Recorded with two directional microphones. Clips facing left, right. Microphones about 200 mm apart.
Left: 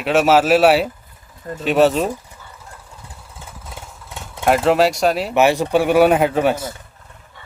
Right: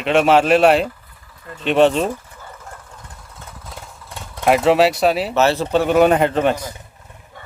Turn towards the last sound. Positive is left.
turn(degrees=-50)  # may be behind; listen again after turning